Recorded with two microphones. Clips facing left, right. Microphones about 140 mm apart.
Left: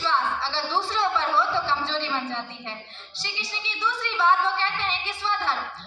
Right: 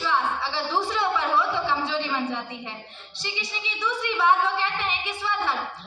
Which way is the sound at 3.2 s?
15° right (ahead or behind).